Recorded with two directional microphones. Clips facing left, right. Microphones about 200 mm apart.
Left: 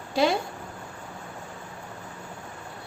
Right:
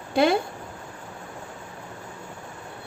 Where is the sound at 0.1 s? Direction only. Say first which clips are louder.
Right 3 dB; 55° right (ahead or behind).